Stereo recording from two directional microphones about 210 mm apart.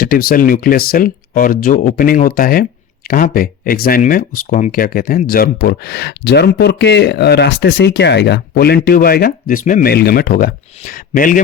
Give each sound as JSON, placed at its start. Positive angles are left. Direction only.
{"t": 0.0, "sound": "speech", "side_deg": 45}